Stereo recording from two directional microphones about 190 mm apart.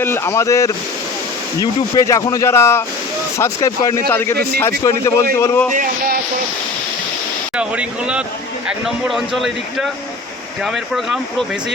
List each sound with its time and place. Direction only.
0.0 s speech: 15° left (ahead or behind)
5.7 s speech: 45° right (ahead or behind)
7.5 s speech: 5° right (ahead or behind)